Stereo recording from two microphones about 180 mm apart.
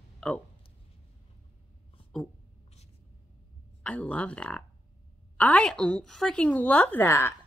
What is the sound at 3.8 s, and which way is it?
A woman's voice, 5° left (ahead or behind).